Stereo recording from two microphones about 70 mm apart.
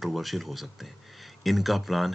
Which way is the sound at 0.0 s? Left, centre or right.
Centre.